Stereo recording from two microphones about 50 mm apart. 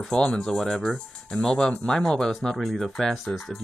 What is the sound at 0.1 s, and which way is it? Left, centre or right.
Speech, centre.